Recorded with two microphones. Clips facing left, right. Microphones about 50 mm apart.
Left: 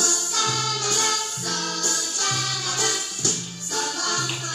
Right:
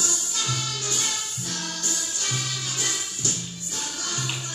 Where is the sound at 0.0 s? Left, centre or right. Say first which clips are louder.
Left 5 dB; left.